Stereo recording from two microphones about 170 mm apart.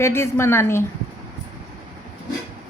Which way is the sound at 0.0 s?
15° left (ahead or behind).